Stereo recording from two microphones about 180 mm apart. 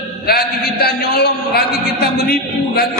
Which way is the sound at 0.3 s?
60° left (ahead or behind).